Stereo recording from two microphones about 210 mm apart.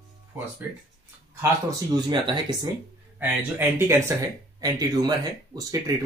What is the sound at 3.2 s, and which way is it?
Speech, 10° right (ahead or behind).